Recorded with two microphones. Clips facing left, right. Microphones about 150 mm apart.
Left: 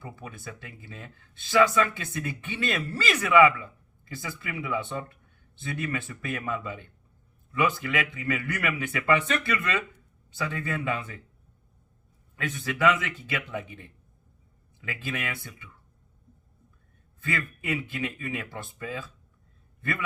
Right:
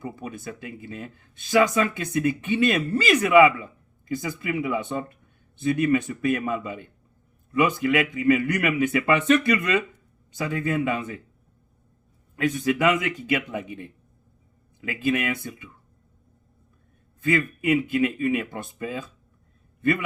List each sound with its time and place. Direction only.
0.0 s speech: 15° right (ahead or behind)
12.5 s speech: 15° right (ahead or behind)
17.2 s speech: 15° right (ahead or behind)